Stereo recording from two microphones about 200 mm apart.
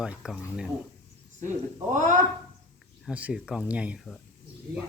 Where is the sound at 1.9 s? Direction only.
40° right (ahead or behind).